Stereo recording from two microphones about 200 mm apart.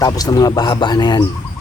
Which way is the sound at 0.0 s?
20° left (ahead or behind).